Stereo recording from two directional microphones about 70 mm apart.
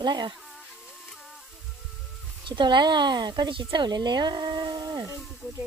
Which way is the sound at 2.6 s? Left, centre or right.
Right.